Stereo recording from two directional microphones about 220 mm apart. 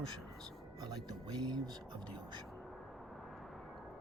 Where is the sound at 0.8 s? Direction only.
20° right (ahead or behind).